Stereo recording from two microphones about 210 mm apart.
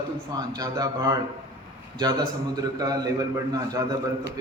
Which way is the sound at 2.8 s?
15° right (ahead or behind).